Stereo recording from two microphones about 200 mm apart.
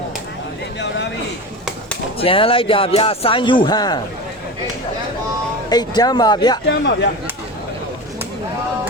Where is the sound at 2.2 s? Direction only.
25° left (ahead or behind).